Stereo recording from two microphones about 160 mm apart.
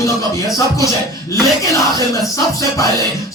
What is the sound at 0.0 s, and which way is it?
Speech, 20° left (ahead or behind).